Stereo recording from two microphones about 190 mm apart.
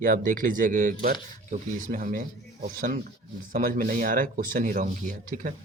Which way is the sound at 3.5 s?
45° right (ahead or behind).